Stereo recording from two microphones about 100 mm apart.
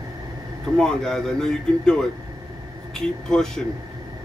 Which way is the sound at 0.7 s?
5° left (ahead or behind).